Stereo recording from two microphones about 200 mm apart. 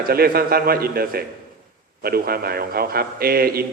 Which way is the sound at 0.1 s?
50° right (ahead or behind).